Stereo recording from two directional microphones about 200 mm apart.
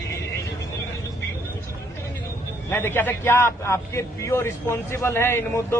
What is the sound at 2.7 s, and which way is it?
A man's voice, 10° left (ahead or behind).